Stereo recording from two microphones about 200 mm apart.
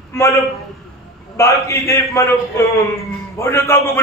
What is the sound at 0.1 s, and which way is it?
A man's voice, 15° left (ahead or behind).